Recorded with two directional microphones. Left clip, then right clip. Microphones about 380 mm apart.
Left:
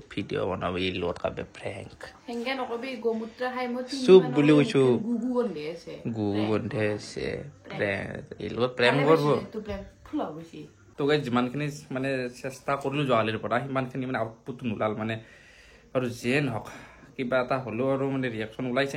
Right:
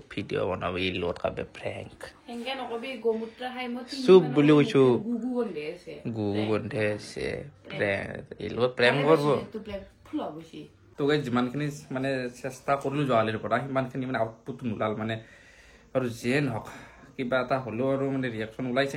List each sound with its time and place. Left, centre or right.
0.1 s a man's voice: centre